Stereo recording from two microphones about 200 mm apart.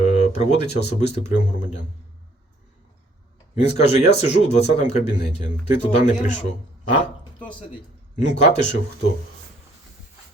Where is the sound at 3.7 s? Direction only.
35° left (ahead or behind).